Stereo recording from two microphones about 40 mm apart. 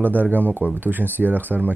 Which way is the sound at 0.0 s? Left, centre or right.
Right.